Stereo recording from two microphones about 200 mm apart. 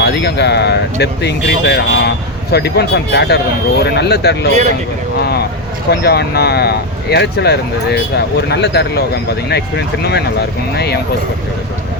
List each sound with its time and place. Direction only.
0.0 s speech: 55° left (ahead or behind)
5.9 s speech: 55° left (ahead or behind)